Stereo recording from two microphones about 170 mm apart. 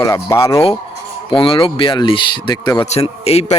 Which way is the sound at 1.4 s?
30° left (ahead or behind).